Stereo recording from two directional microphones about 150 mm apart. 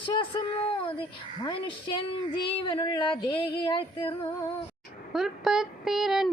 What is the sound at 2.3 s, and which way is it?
Female singing, 35° left (ahead or behind).